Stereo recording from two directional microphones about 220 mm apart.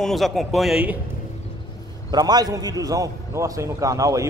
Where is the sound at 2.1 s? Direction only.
20° right (ahead or behind).